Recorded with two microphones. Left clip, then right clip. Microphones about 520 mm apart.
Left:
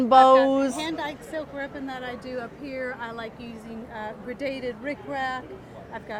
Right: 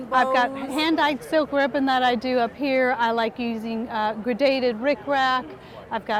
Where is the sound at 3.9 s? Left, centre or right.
Right.